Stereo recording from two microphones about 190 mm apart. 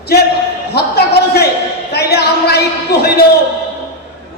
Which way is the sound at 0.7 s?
55° left (ahead or behind).